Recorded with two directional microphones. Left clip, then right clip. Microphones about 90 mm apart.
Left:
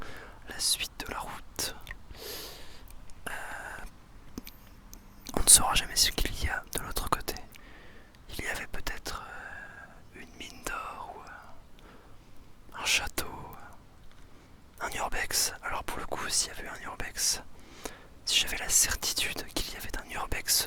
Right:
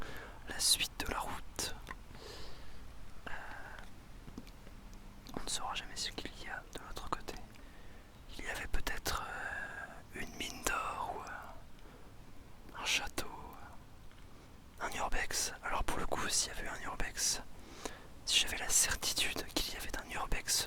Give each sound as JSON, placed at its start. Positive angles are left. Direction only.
{"t": 0.0, "sound": "whispering", "side_deg": 5}
{"t": 2.1, "sound": "sniff", "side_deg": 30}
{"t": 3.2, "sound": "a sound", "side_deg": 50}
{"t": 4.4, "sound": "whispering", "side_deg": 30}
{"t": 8.5, "sound": "whispering", "side_deg": 5}
{"t": 12.7, "sound": "whispering", "side_deg": 15}
{"t": 14.8, "sound": "whispering", "side_deg": 10}